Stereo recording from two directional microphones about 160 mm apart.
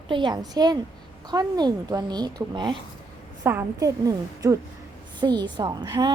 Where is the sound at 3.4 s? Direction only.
15° right (ahead or behind).